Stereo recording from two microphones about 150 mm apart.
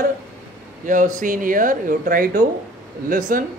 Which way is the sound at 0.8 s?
60° right (ahead or behind).